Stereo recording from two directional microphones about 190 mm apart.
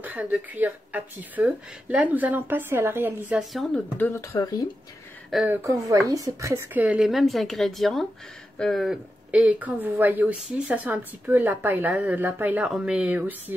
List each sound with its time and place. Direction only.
0.0 s speech: 10° right (ahead or behind)
3.7 s speech: 10° left (ahead or behind)
5.3 s speech: centre (ahead or behind)
5.6 s speech: 15° right (ahead or behind)